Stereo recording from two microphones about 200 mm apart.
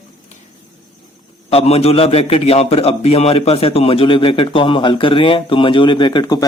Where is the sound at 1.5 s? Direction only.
30° left (ahead or behind).